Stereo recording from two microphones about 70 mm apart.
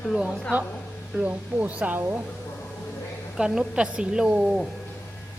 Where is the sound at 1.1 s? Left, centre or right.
Centre.